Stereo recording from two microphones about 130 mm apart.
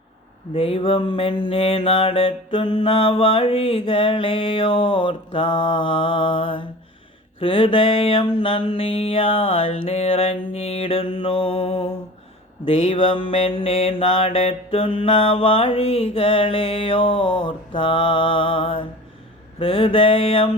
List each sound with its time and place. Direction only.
0.5 s mantra: 45° left (ahead or behind)